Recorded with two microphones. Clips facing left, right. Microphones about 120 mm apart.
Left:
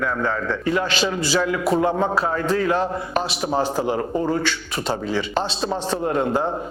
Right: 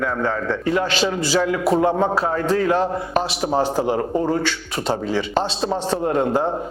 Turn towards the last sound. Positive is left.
turn(degrees=-45)  # may be behind; listen again after turning